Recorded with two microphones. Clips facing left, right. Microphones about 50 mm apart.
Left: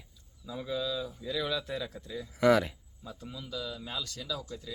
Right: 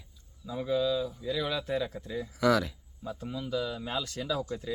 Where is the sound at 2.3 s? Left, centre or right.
Left.